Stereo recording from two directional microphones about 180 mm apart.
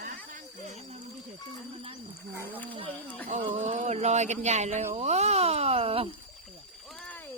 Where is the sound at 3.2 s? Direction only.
40° right (ahead or behind).